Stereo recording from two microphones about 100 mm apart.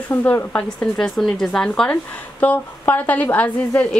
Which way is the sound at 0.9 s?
5° left (ahead or behind).